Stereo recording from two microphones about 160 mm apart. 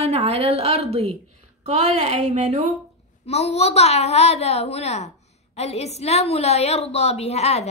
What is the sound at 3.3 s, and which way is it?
A woman's voice, 40° left (ahead or behind).